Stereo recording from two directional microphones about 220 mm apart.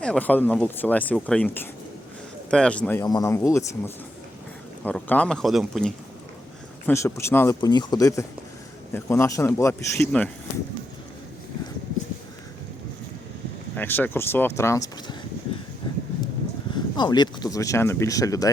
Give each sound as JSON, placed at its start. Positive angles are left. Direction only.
{"t": 0.0, "sound": "a man's voice", "side_deg": 5}
{"t": 6.8, "sound": "speech", "side_deg": 10}
{"t": 13.7, "sound": "speech", "side_deg": 10}
{"t": 16.7, "sound": "speech", "side_deg": 20}